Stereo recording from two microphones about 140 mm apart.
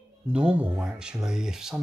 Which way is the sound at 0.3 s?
10° right (ahead or behind).